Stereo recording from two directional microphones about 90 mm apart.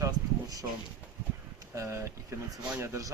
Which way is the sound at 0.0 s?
40° right (ahead or behind).